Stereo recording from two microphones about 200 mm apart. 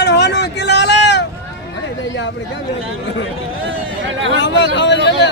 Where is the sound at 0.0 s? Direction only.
60° left (ahead or behind).